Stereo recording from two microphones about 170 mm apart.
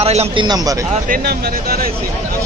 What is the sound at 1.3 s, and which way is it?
Speech, 65° right (ahead or behind).